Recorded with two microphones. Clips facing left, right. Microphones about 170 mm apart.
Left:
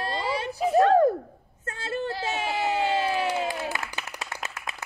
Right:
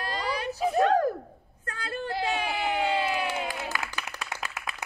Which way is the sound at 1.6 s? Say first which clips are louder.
Left 4 dB; 25° left (ahead or behind).